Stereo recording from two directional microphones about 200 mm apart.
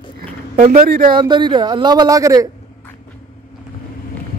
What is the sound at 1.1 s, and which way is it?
Speech, 20° right (ahead or behind).